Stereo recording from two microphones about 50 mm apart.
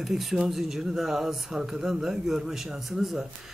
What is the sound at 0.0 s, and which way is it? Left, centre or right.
Speech, centre.